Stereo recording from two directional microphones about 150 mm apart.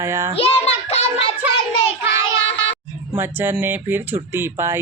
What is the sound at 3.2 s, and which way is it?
Speech, 15° right (ahead or behind).